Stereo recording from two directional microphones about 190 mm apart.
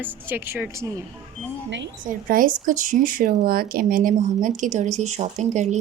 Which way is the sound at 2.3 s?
45° right (ahead or behind).